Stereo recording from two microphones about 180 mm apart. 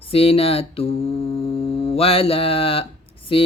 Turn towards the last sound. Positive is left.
turn(degrees=30)  # may be behind; listen again after turning